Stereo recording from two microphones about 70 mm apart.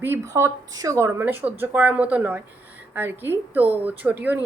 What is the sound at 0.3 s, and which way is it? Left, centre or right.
Speech, right.